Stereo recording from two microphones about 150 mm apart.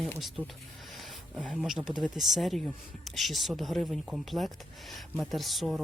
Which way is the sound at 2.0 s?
Centre (ahead or behind).